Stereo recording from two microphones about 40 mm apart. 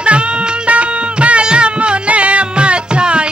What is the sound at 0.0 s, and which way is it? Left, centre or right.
Music, right.